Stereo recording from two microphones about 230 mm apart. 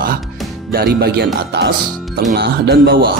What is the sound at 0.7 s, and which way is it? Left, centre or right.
Speech, right.